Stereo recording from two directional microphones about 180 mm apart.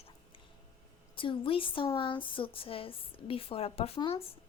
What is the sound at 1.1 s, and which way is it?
Speech, 30° left (ahead or behind).